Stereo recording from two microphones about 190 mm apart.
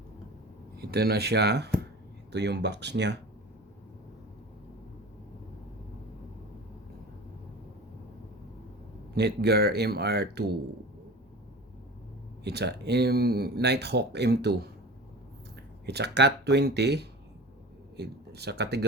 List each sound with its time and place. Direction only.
0.8 s speech: 55° right (ahead or behind)
9.1 s speech: 60° right (ahead or behind)
12.5 s speech: 60° right (ahead or behind)
15.9 s speech: 60° right (ahead or behind)